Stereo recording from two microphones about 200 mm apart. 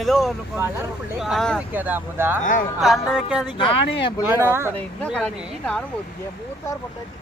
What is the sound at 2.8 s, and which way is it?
Speech, centre (ahead or behind).